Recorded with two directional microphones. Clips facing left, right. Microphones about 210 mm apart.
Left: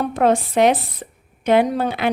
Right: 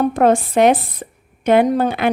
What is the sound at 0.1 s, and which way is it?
Speech, 50° right (ahead or behind).